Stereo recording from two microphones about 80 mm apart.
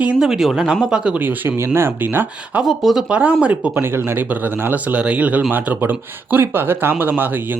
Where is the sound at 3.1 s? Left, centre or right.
Centre.